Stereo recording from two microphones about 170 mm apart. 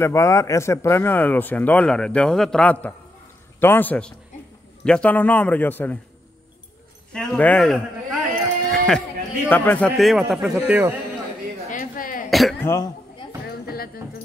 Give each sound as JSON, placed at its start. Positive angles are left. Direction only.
{"t": 0.0, "sound": "speech", "side_deg": 15}
{"t": 7.1, "sound": "a man's voice", "side_deg": 5}
{"t": 8.7, "sound": "a sound", "side_deg": 5}
{"t": 9.5, "sound": "a man's voice", "side_deg": 10}
{"t": 11.7, "sound": "a sound", "side_deg": 50}
{"t": 12.3, "sound": "speech", "side_deg": 0}
{"t": 12.5, "sound": "speech", "side_deg": 15}
{"t": 13.5, "sound": "music", "side_deg": 65}